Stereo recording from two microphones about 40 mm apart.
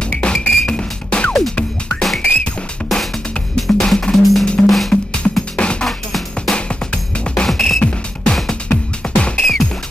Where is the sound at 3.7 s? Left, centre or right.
Centre.